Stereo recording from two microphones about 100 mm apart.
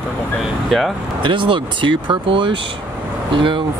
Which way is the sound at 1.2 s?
55° right (ahead or behind).